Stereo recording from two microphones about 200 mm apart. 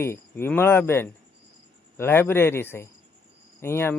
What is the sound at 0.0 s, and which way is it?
Speech, 10° left (ahead or behind).